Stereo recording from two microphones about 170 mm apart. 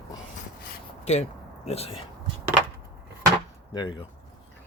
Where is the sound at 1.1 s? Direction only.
40° left (ahead or behind).